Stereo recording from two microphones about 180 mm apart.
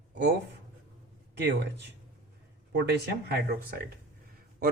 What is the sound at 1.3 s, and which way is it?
Speech, 70° right (ahead or behind).